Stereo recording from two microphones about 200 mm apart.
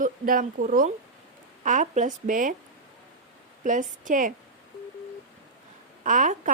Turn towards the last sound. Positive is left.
turn(degrees=-40)  # may be behind; listen again after turning